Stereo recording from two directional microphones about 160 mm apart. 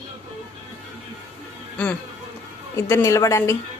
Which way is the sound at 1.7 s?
10° left (ahead or behind).